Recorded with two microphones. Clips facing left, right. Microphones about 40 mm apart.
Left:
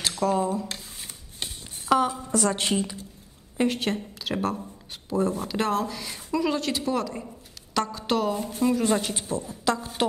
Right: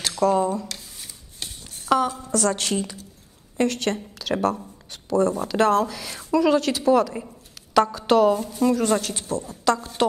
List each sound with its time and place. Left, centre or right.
0.2 s a woman's voice: centre
0.7 s rub: left
2.0 s a woman's voice: centre
7.2 s a sound: centre
8.6 s a woman's voice: centre